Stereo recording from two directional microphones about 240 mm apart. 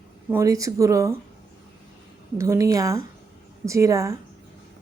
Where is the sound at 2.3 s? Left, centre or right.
Centre.